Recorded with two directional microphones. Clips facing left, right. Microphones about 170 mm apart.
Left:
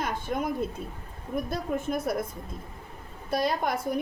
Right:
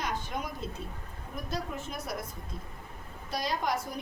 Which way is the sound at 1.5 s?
55° left (ahead or behind).